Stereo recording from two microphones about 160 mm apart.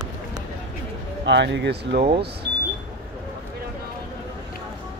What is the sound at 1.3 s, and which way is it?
Speech, 90° right.